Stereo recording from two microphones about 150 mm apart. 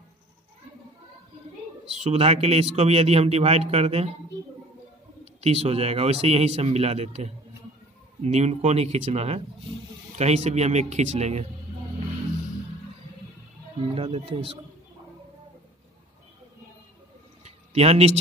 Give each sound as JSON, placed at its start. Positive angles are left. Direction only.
{"t": 1.9, "sound": "a man's voice", "side_deg": -45}
{"t": 5.4, "sound": "a man's voice", "side_deg": -45}
{"t": 13.9, "sound": "speech", "side_deg": -40}
{"t": 17.5, "sound": "a sound", "side_deg": -45}